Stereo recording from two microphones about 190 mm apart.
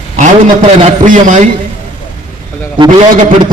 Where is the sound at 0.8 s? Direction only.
40° right (ahead or behind).